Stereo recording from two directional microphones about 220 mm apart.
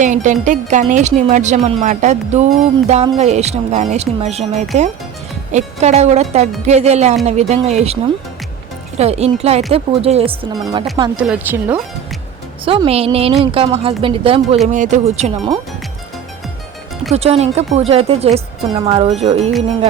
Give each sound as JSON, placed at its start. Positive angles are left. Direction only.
{"t": 0.0, "sound": "speech", "side_deg": -35}
{"t": 9.0, "sound": "speech", "side_deg": -30}
{"t": 11.2, "sound": "a woman's voice", "side_deg": -5}
{"t": 12.6, "sound": "speech", "side_deg": -25}
{"t": 17.2, "sound": "speech", "side_deg": -30}